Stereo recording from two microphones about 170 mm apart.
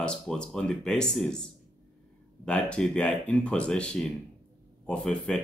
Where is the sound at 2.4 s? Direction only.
5° left (ahead or behind).